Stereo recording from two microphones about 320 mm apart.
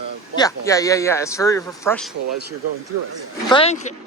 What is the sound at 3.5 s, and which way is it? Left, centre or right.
Speech, centre.